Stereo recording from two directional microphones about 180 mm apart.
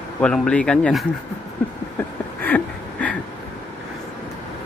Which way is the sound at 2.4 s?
10° left (ahead or behind).